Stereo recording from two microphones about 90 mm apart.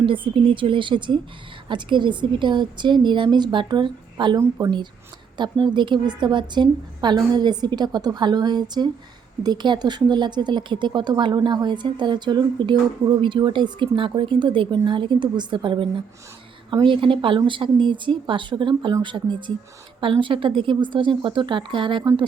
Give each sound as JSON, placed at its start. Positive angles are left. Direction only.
{"t": 0.0, "sound": "speech", "side_deg": -70}
{"t": 4.4, "sound": "a woman's voice", "side_deg": -35}
{"t": 5.4, "sound": "speech", "side_deg": -60}